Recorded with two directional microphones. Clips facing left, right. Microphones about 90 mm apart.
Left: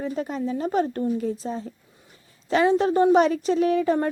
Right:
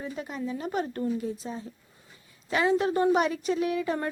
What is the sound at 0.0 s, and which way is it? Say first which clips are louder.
A woman's voice: left 7 dB; 40° left (ahead or behind).